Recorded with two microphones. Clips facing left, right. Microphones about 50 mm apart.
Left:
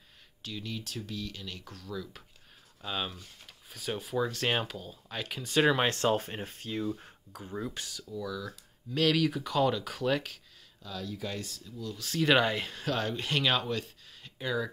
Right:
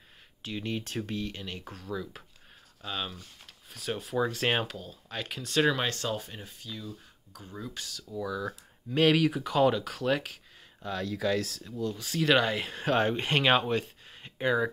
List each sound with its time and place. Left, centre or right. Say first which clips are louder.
0.4 s speech: right 5 dB; right
2.8 s speech: even; centre
4.2 s speech: right 2 dB; centre
5.8 s speech: left 4 dB; left
7.3 s speech: left 3 dB; centre
8.0 s speech: right 4 dB; centre
9.8 s speech: right 1 dB; centre
10.8 s speech: right 6 dB; right
12.0 s speech: even; centre
12.7 s speech: right 6 dB; right